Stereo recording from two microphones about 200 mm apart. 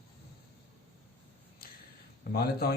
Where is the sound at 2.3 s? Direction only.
50° left (ahead or behind).